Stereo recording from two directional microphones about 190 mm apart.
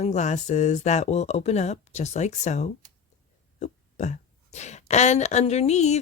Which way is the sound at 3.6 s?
40° left (ahead or behind).